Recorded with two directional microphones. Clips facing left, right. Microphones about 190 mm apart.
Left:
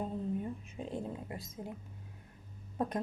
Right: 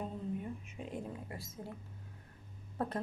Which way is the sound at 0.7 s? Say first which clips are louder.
Left 3 dB; 35° left (ahead or behind).